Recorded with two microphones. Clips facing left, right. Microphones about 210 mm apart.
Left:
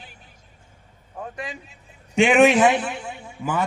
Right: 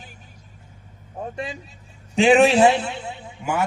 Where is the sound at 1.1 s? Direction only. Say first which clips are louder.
Right 3 dB; 25° right (ahead or behind).